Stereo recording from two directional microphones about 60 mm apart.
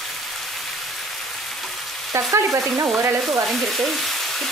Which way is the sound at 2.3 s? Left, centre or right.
Right.